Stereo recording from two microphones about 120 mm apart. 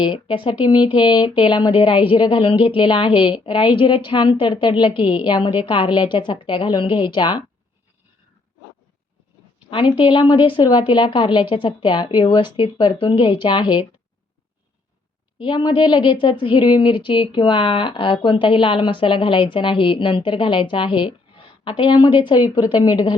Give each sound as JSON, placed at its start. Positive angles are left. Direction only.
{"t": 0.0, "sound": "a woman's voice", "side_deg": 45}
{"t": 9.6, "sound": "a woman's voice", "side_deg": 45}
{"t": 15.4, "sound": "a woman's voice", "side_deg": 40}